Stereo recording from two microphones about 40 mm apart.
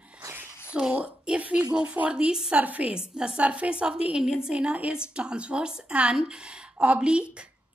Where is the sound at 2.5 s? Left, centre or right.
Right.